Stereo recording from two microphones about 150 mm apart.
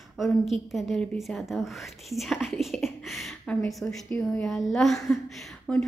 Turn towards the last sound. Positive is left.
turn(degrees=5)  # may be behind; listen again after turning